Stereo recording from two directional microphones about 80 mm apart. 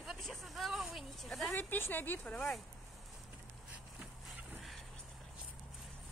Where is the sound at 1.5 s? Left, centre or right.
Left.